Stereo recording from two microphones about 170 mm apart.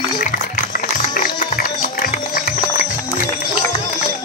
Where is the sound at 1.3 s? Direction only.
55° left (ahead or behind).